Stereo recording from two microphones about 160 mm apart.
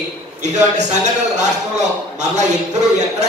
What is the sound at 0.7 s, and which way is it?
A man's voice, 45° right (ahead or behind).